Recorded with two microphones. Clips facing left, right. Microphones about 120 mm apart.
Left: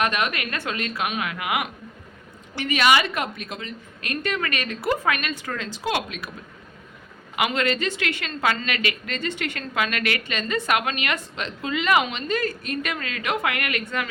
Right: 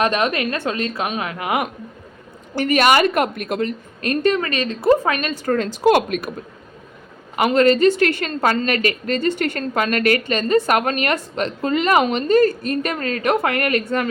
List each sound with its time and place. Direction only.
0.0 s a woman's voice: 30° right (ahead or behind); by 3.8 s 55° right (ahead or behind)
4.0 s a woman's voice: 35° right (ahead or behind)
5.5 s a woman's voice: 50° right (ahead or behind)
7.3 s a woman's voice: 40° right (ahead or behind)